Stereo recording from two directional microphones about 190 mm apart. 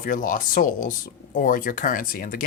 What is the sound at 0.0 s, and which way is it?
Speech, 45° left (ahead or behind).